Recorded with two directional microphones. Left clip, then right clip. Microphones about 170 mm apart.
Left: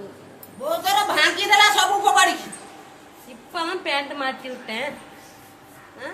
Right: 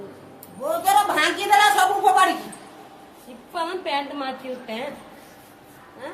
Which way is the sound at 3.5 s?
5° left (ahead or behind).